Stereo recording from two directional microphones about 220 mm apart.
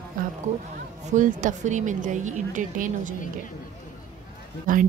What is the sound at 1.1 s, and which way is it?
A woman's voice, 35° right (ahead or behind).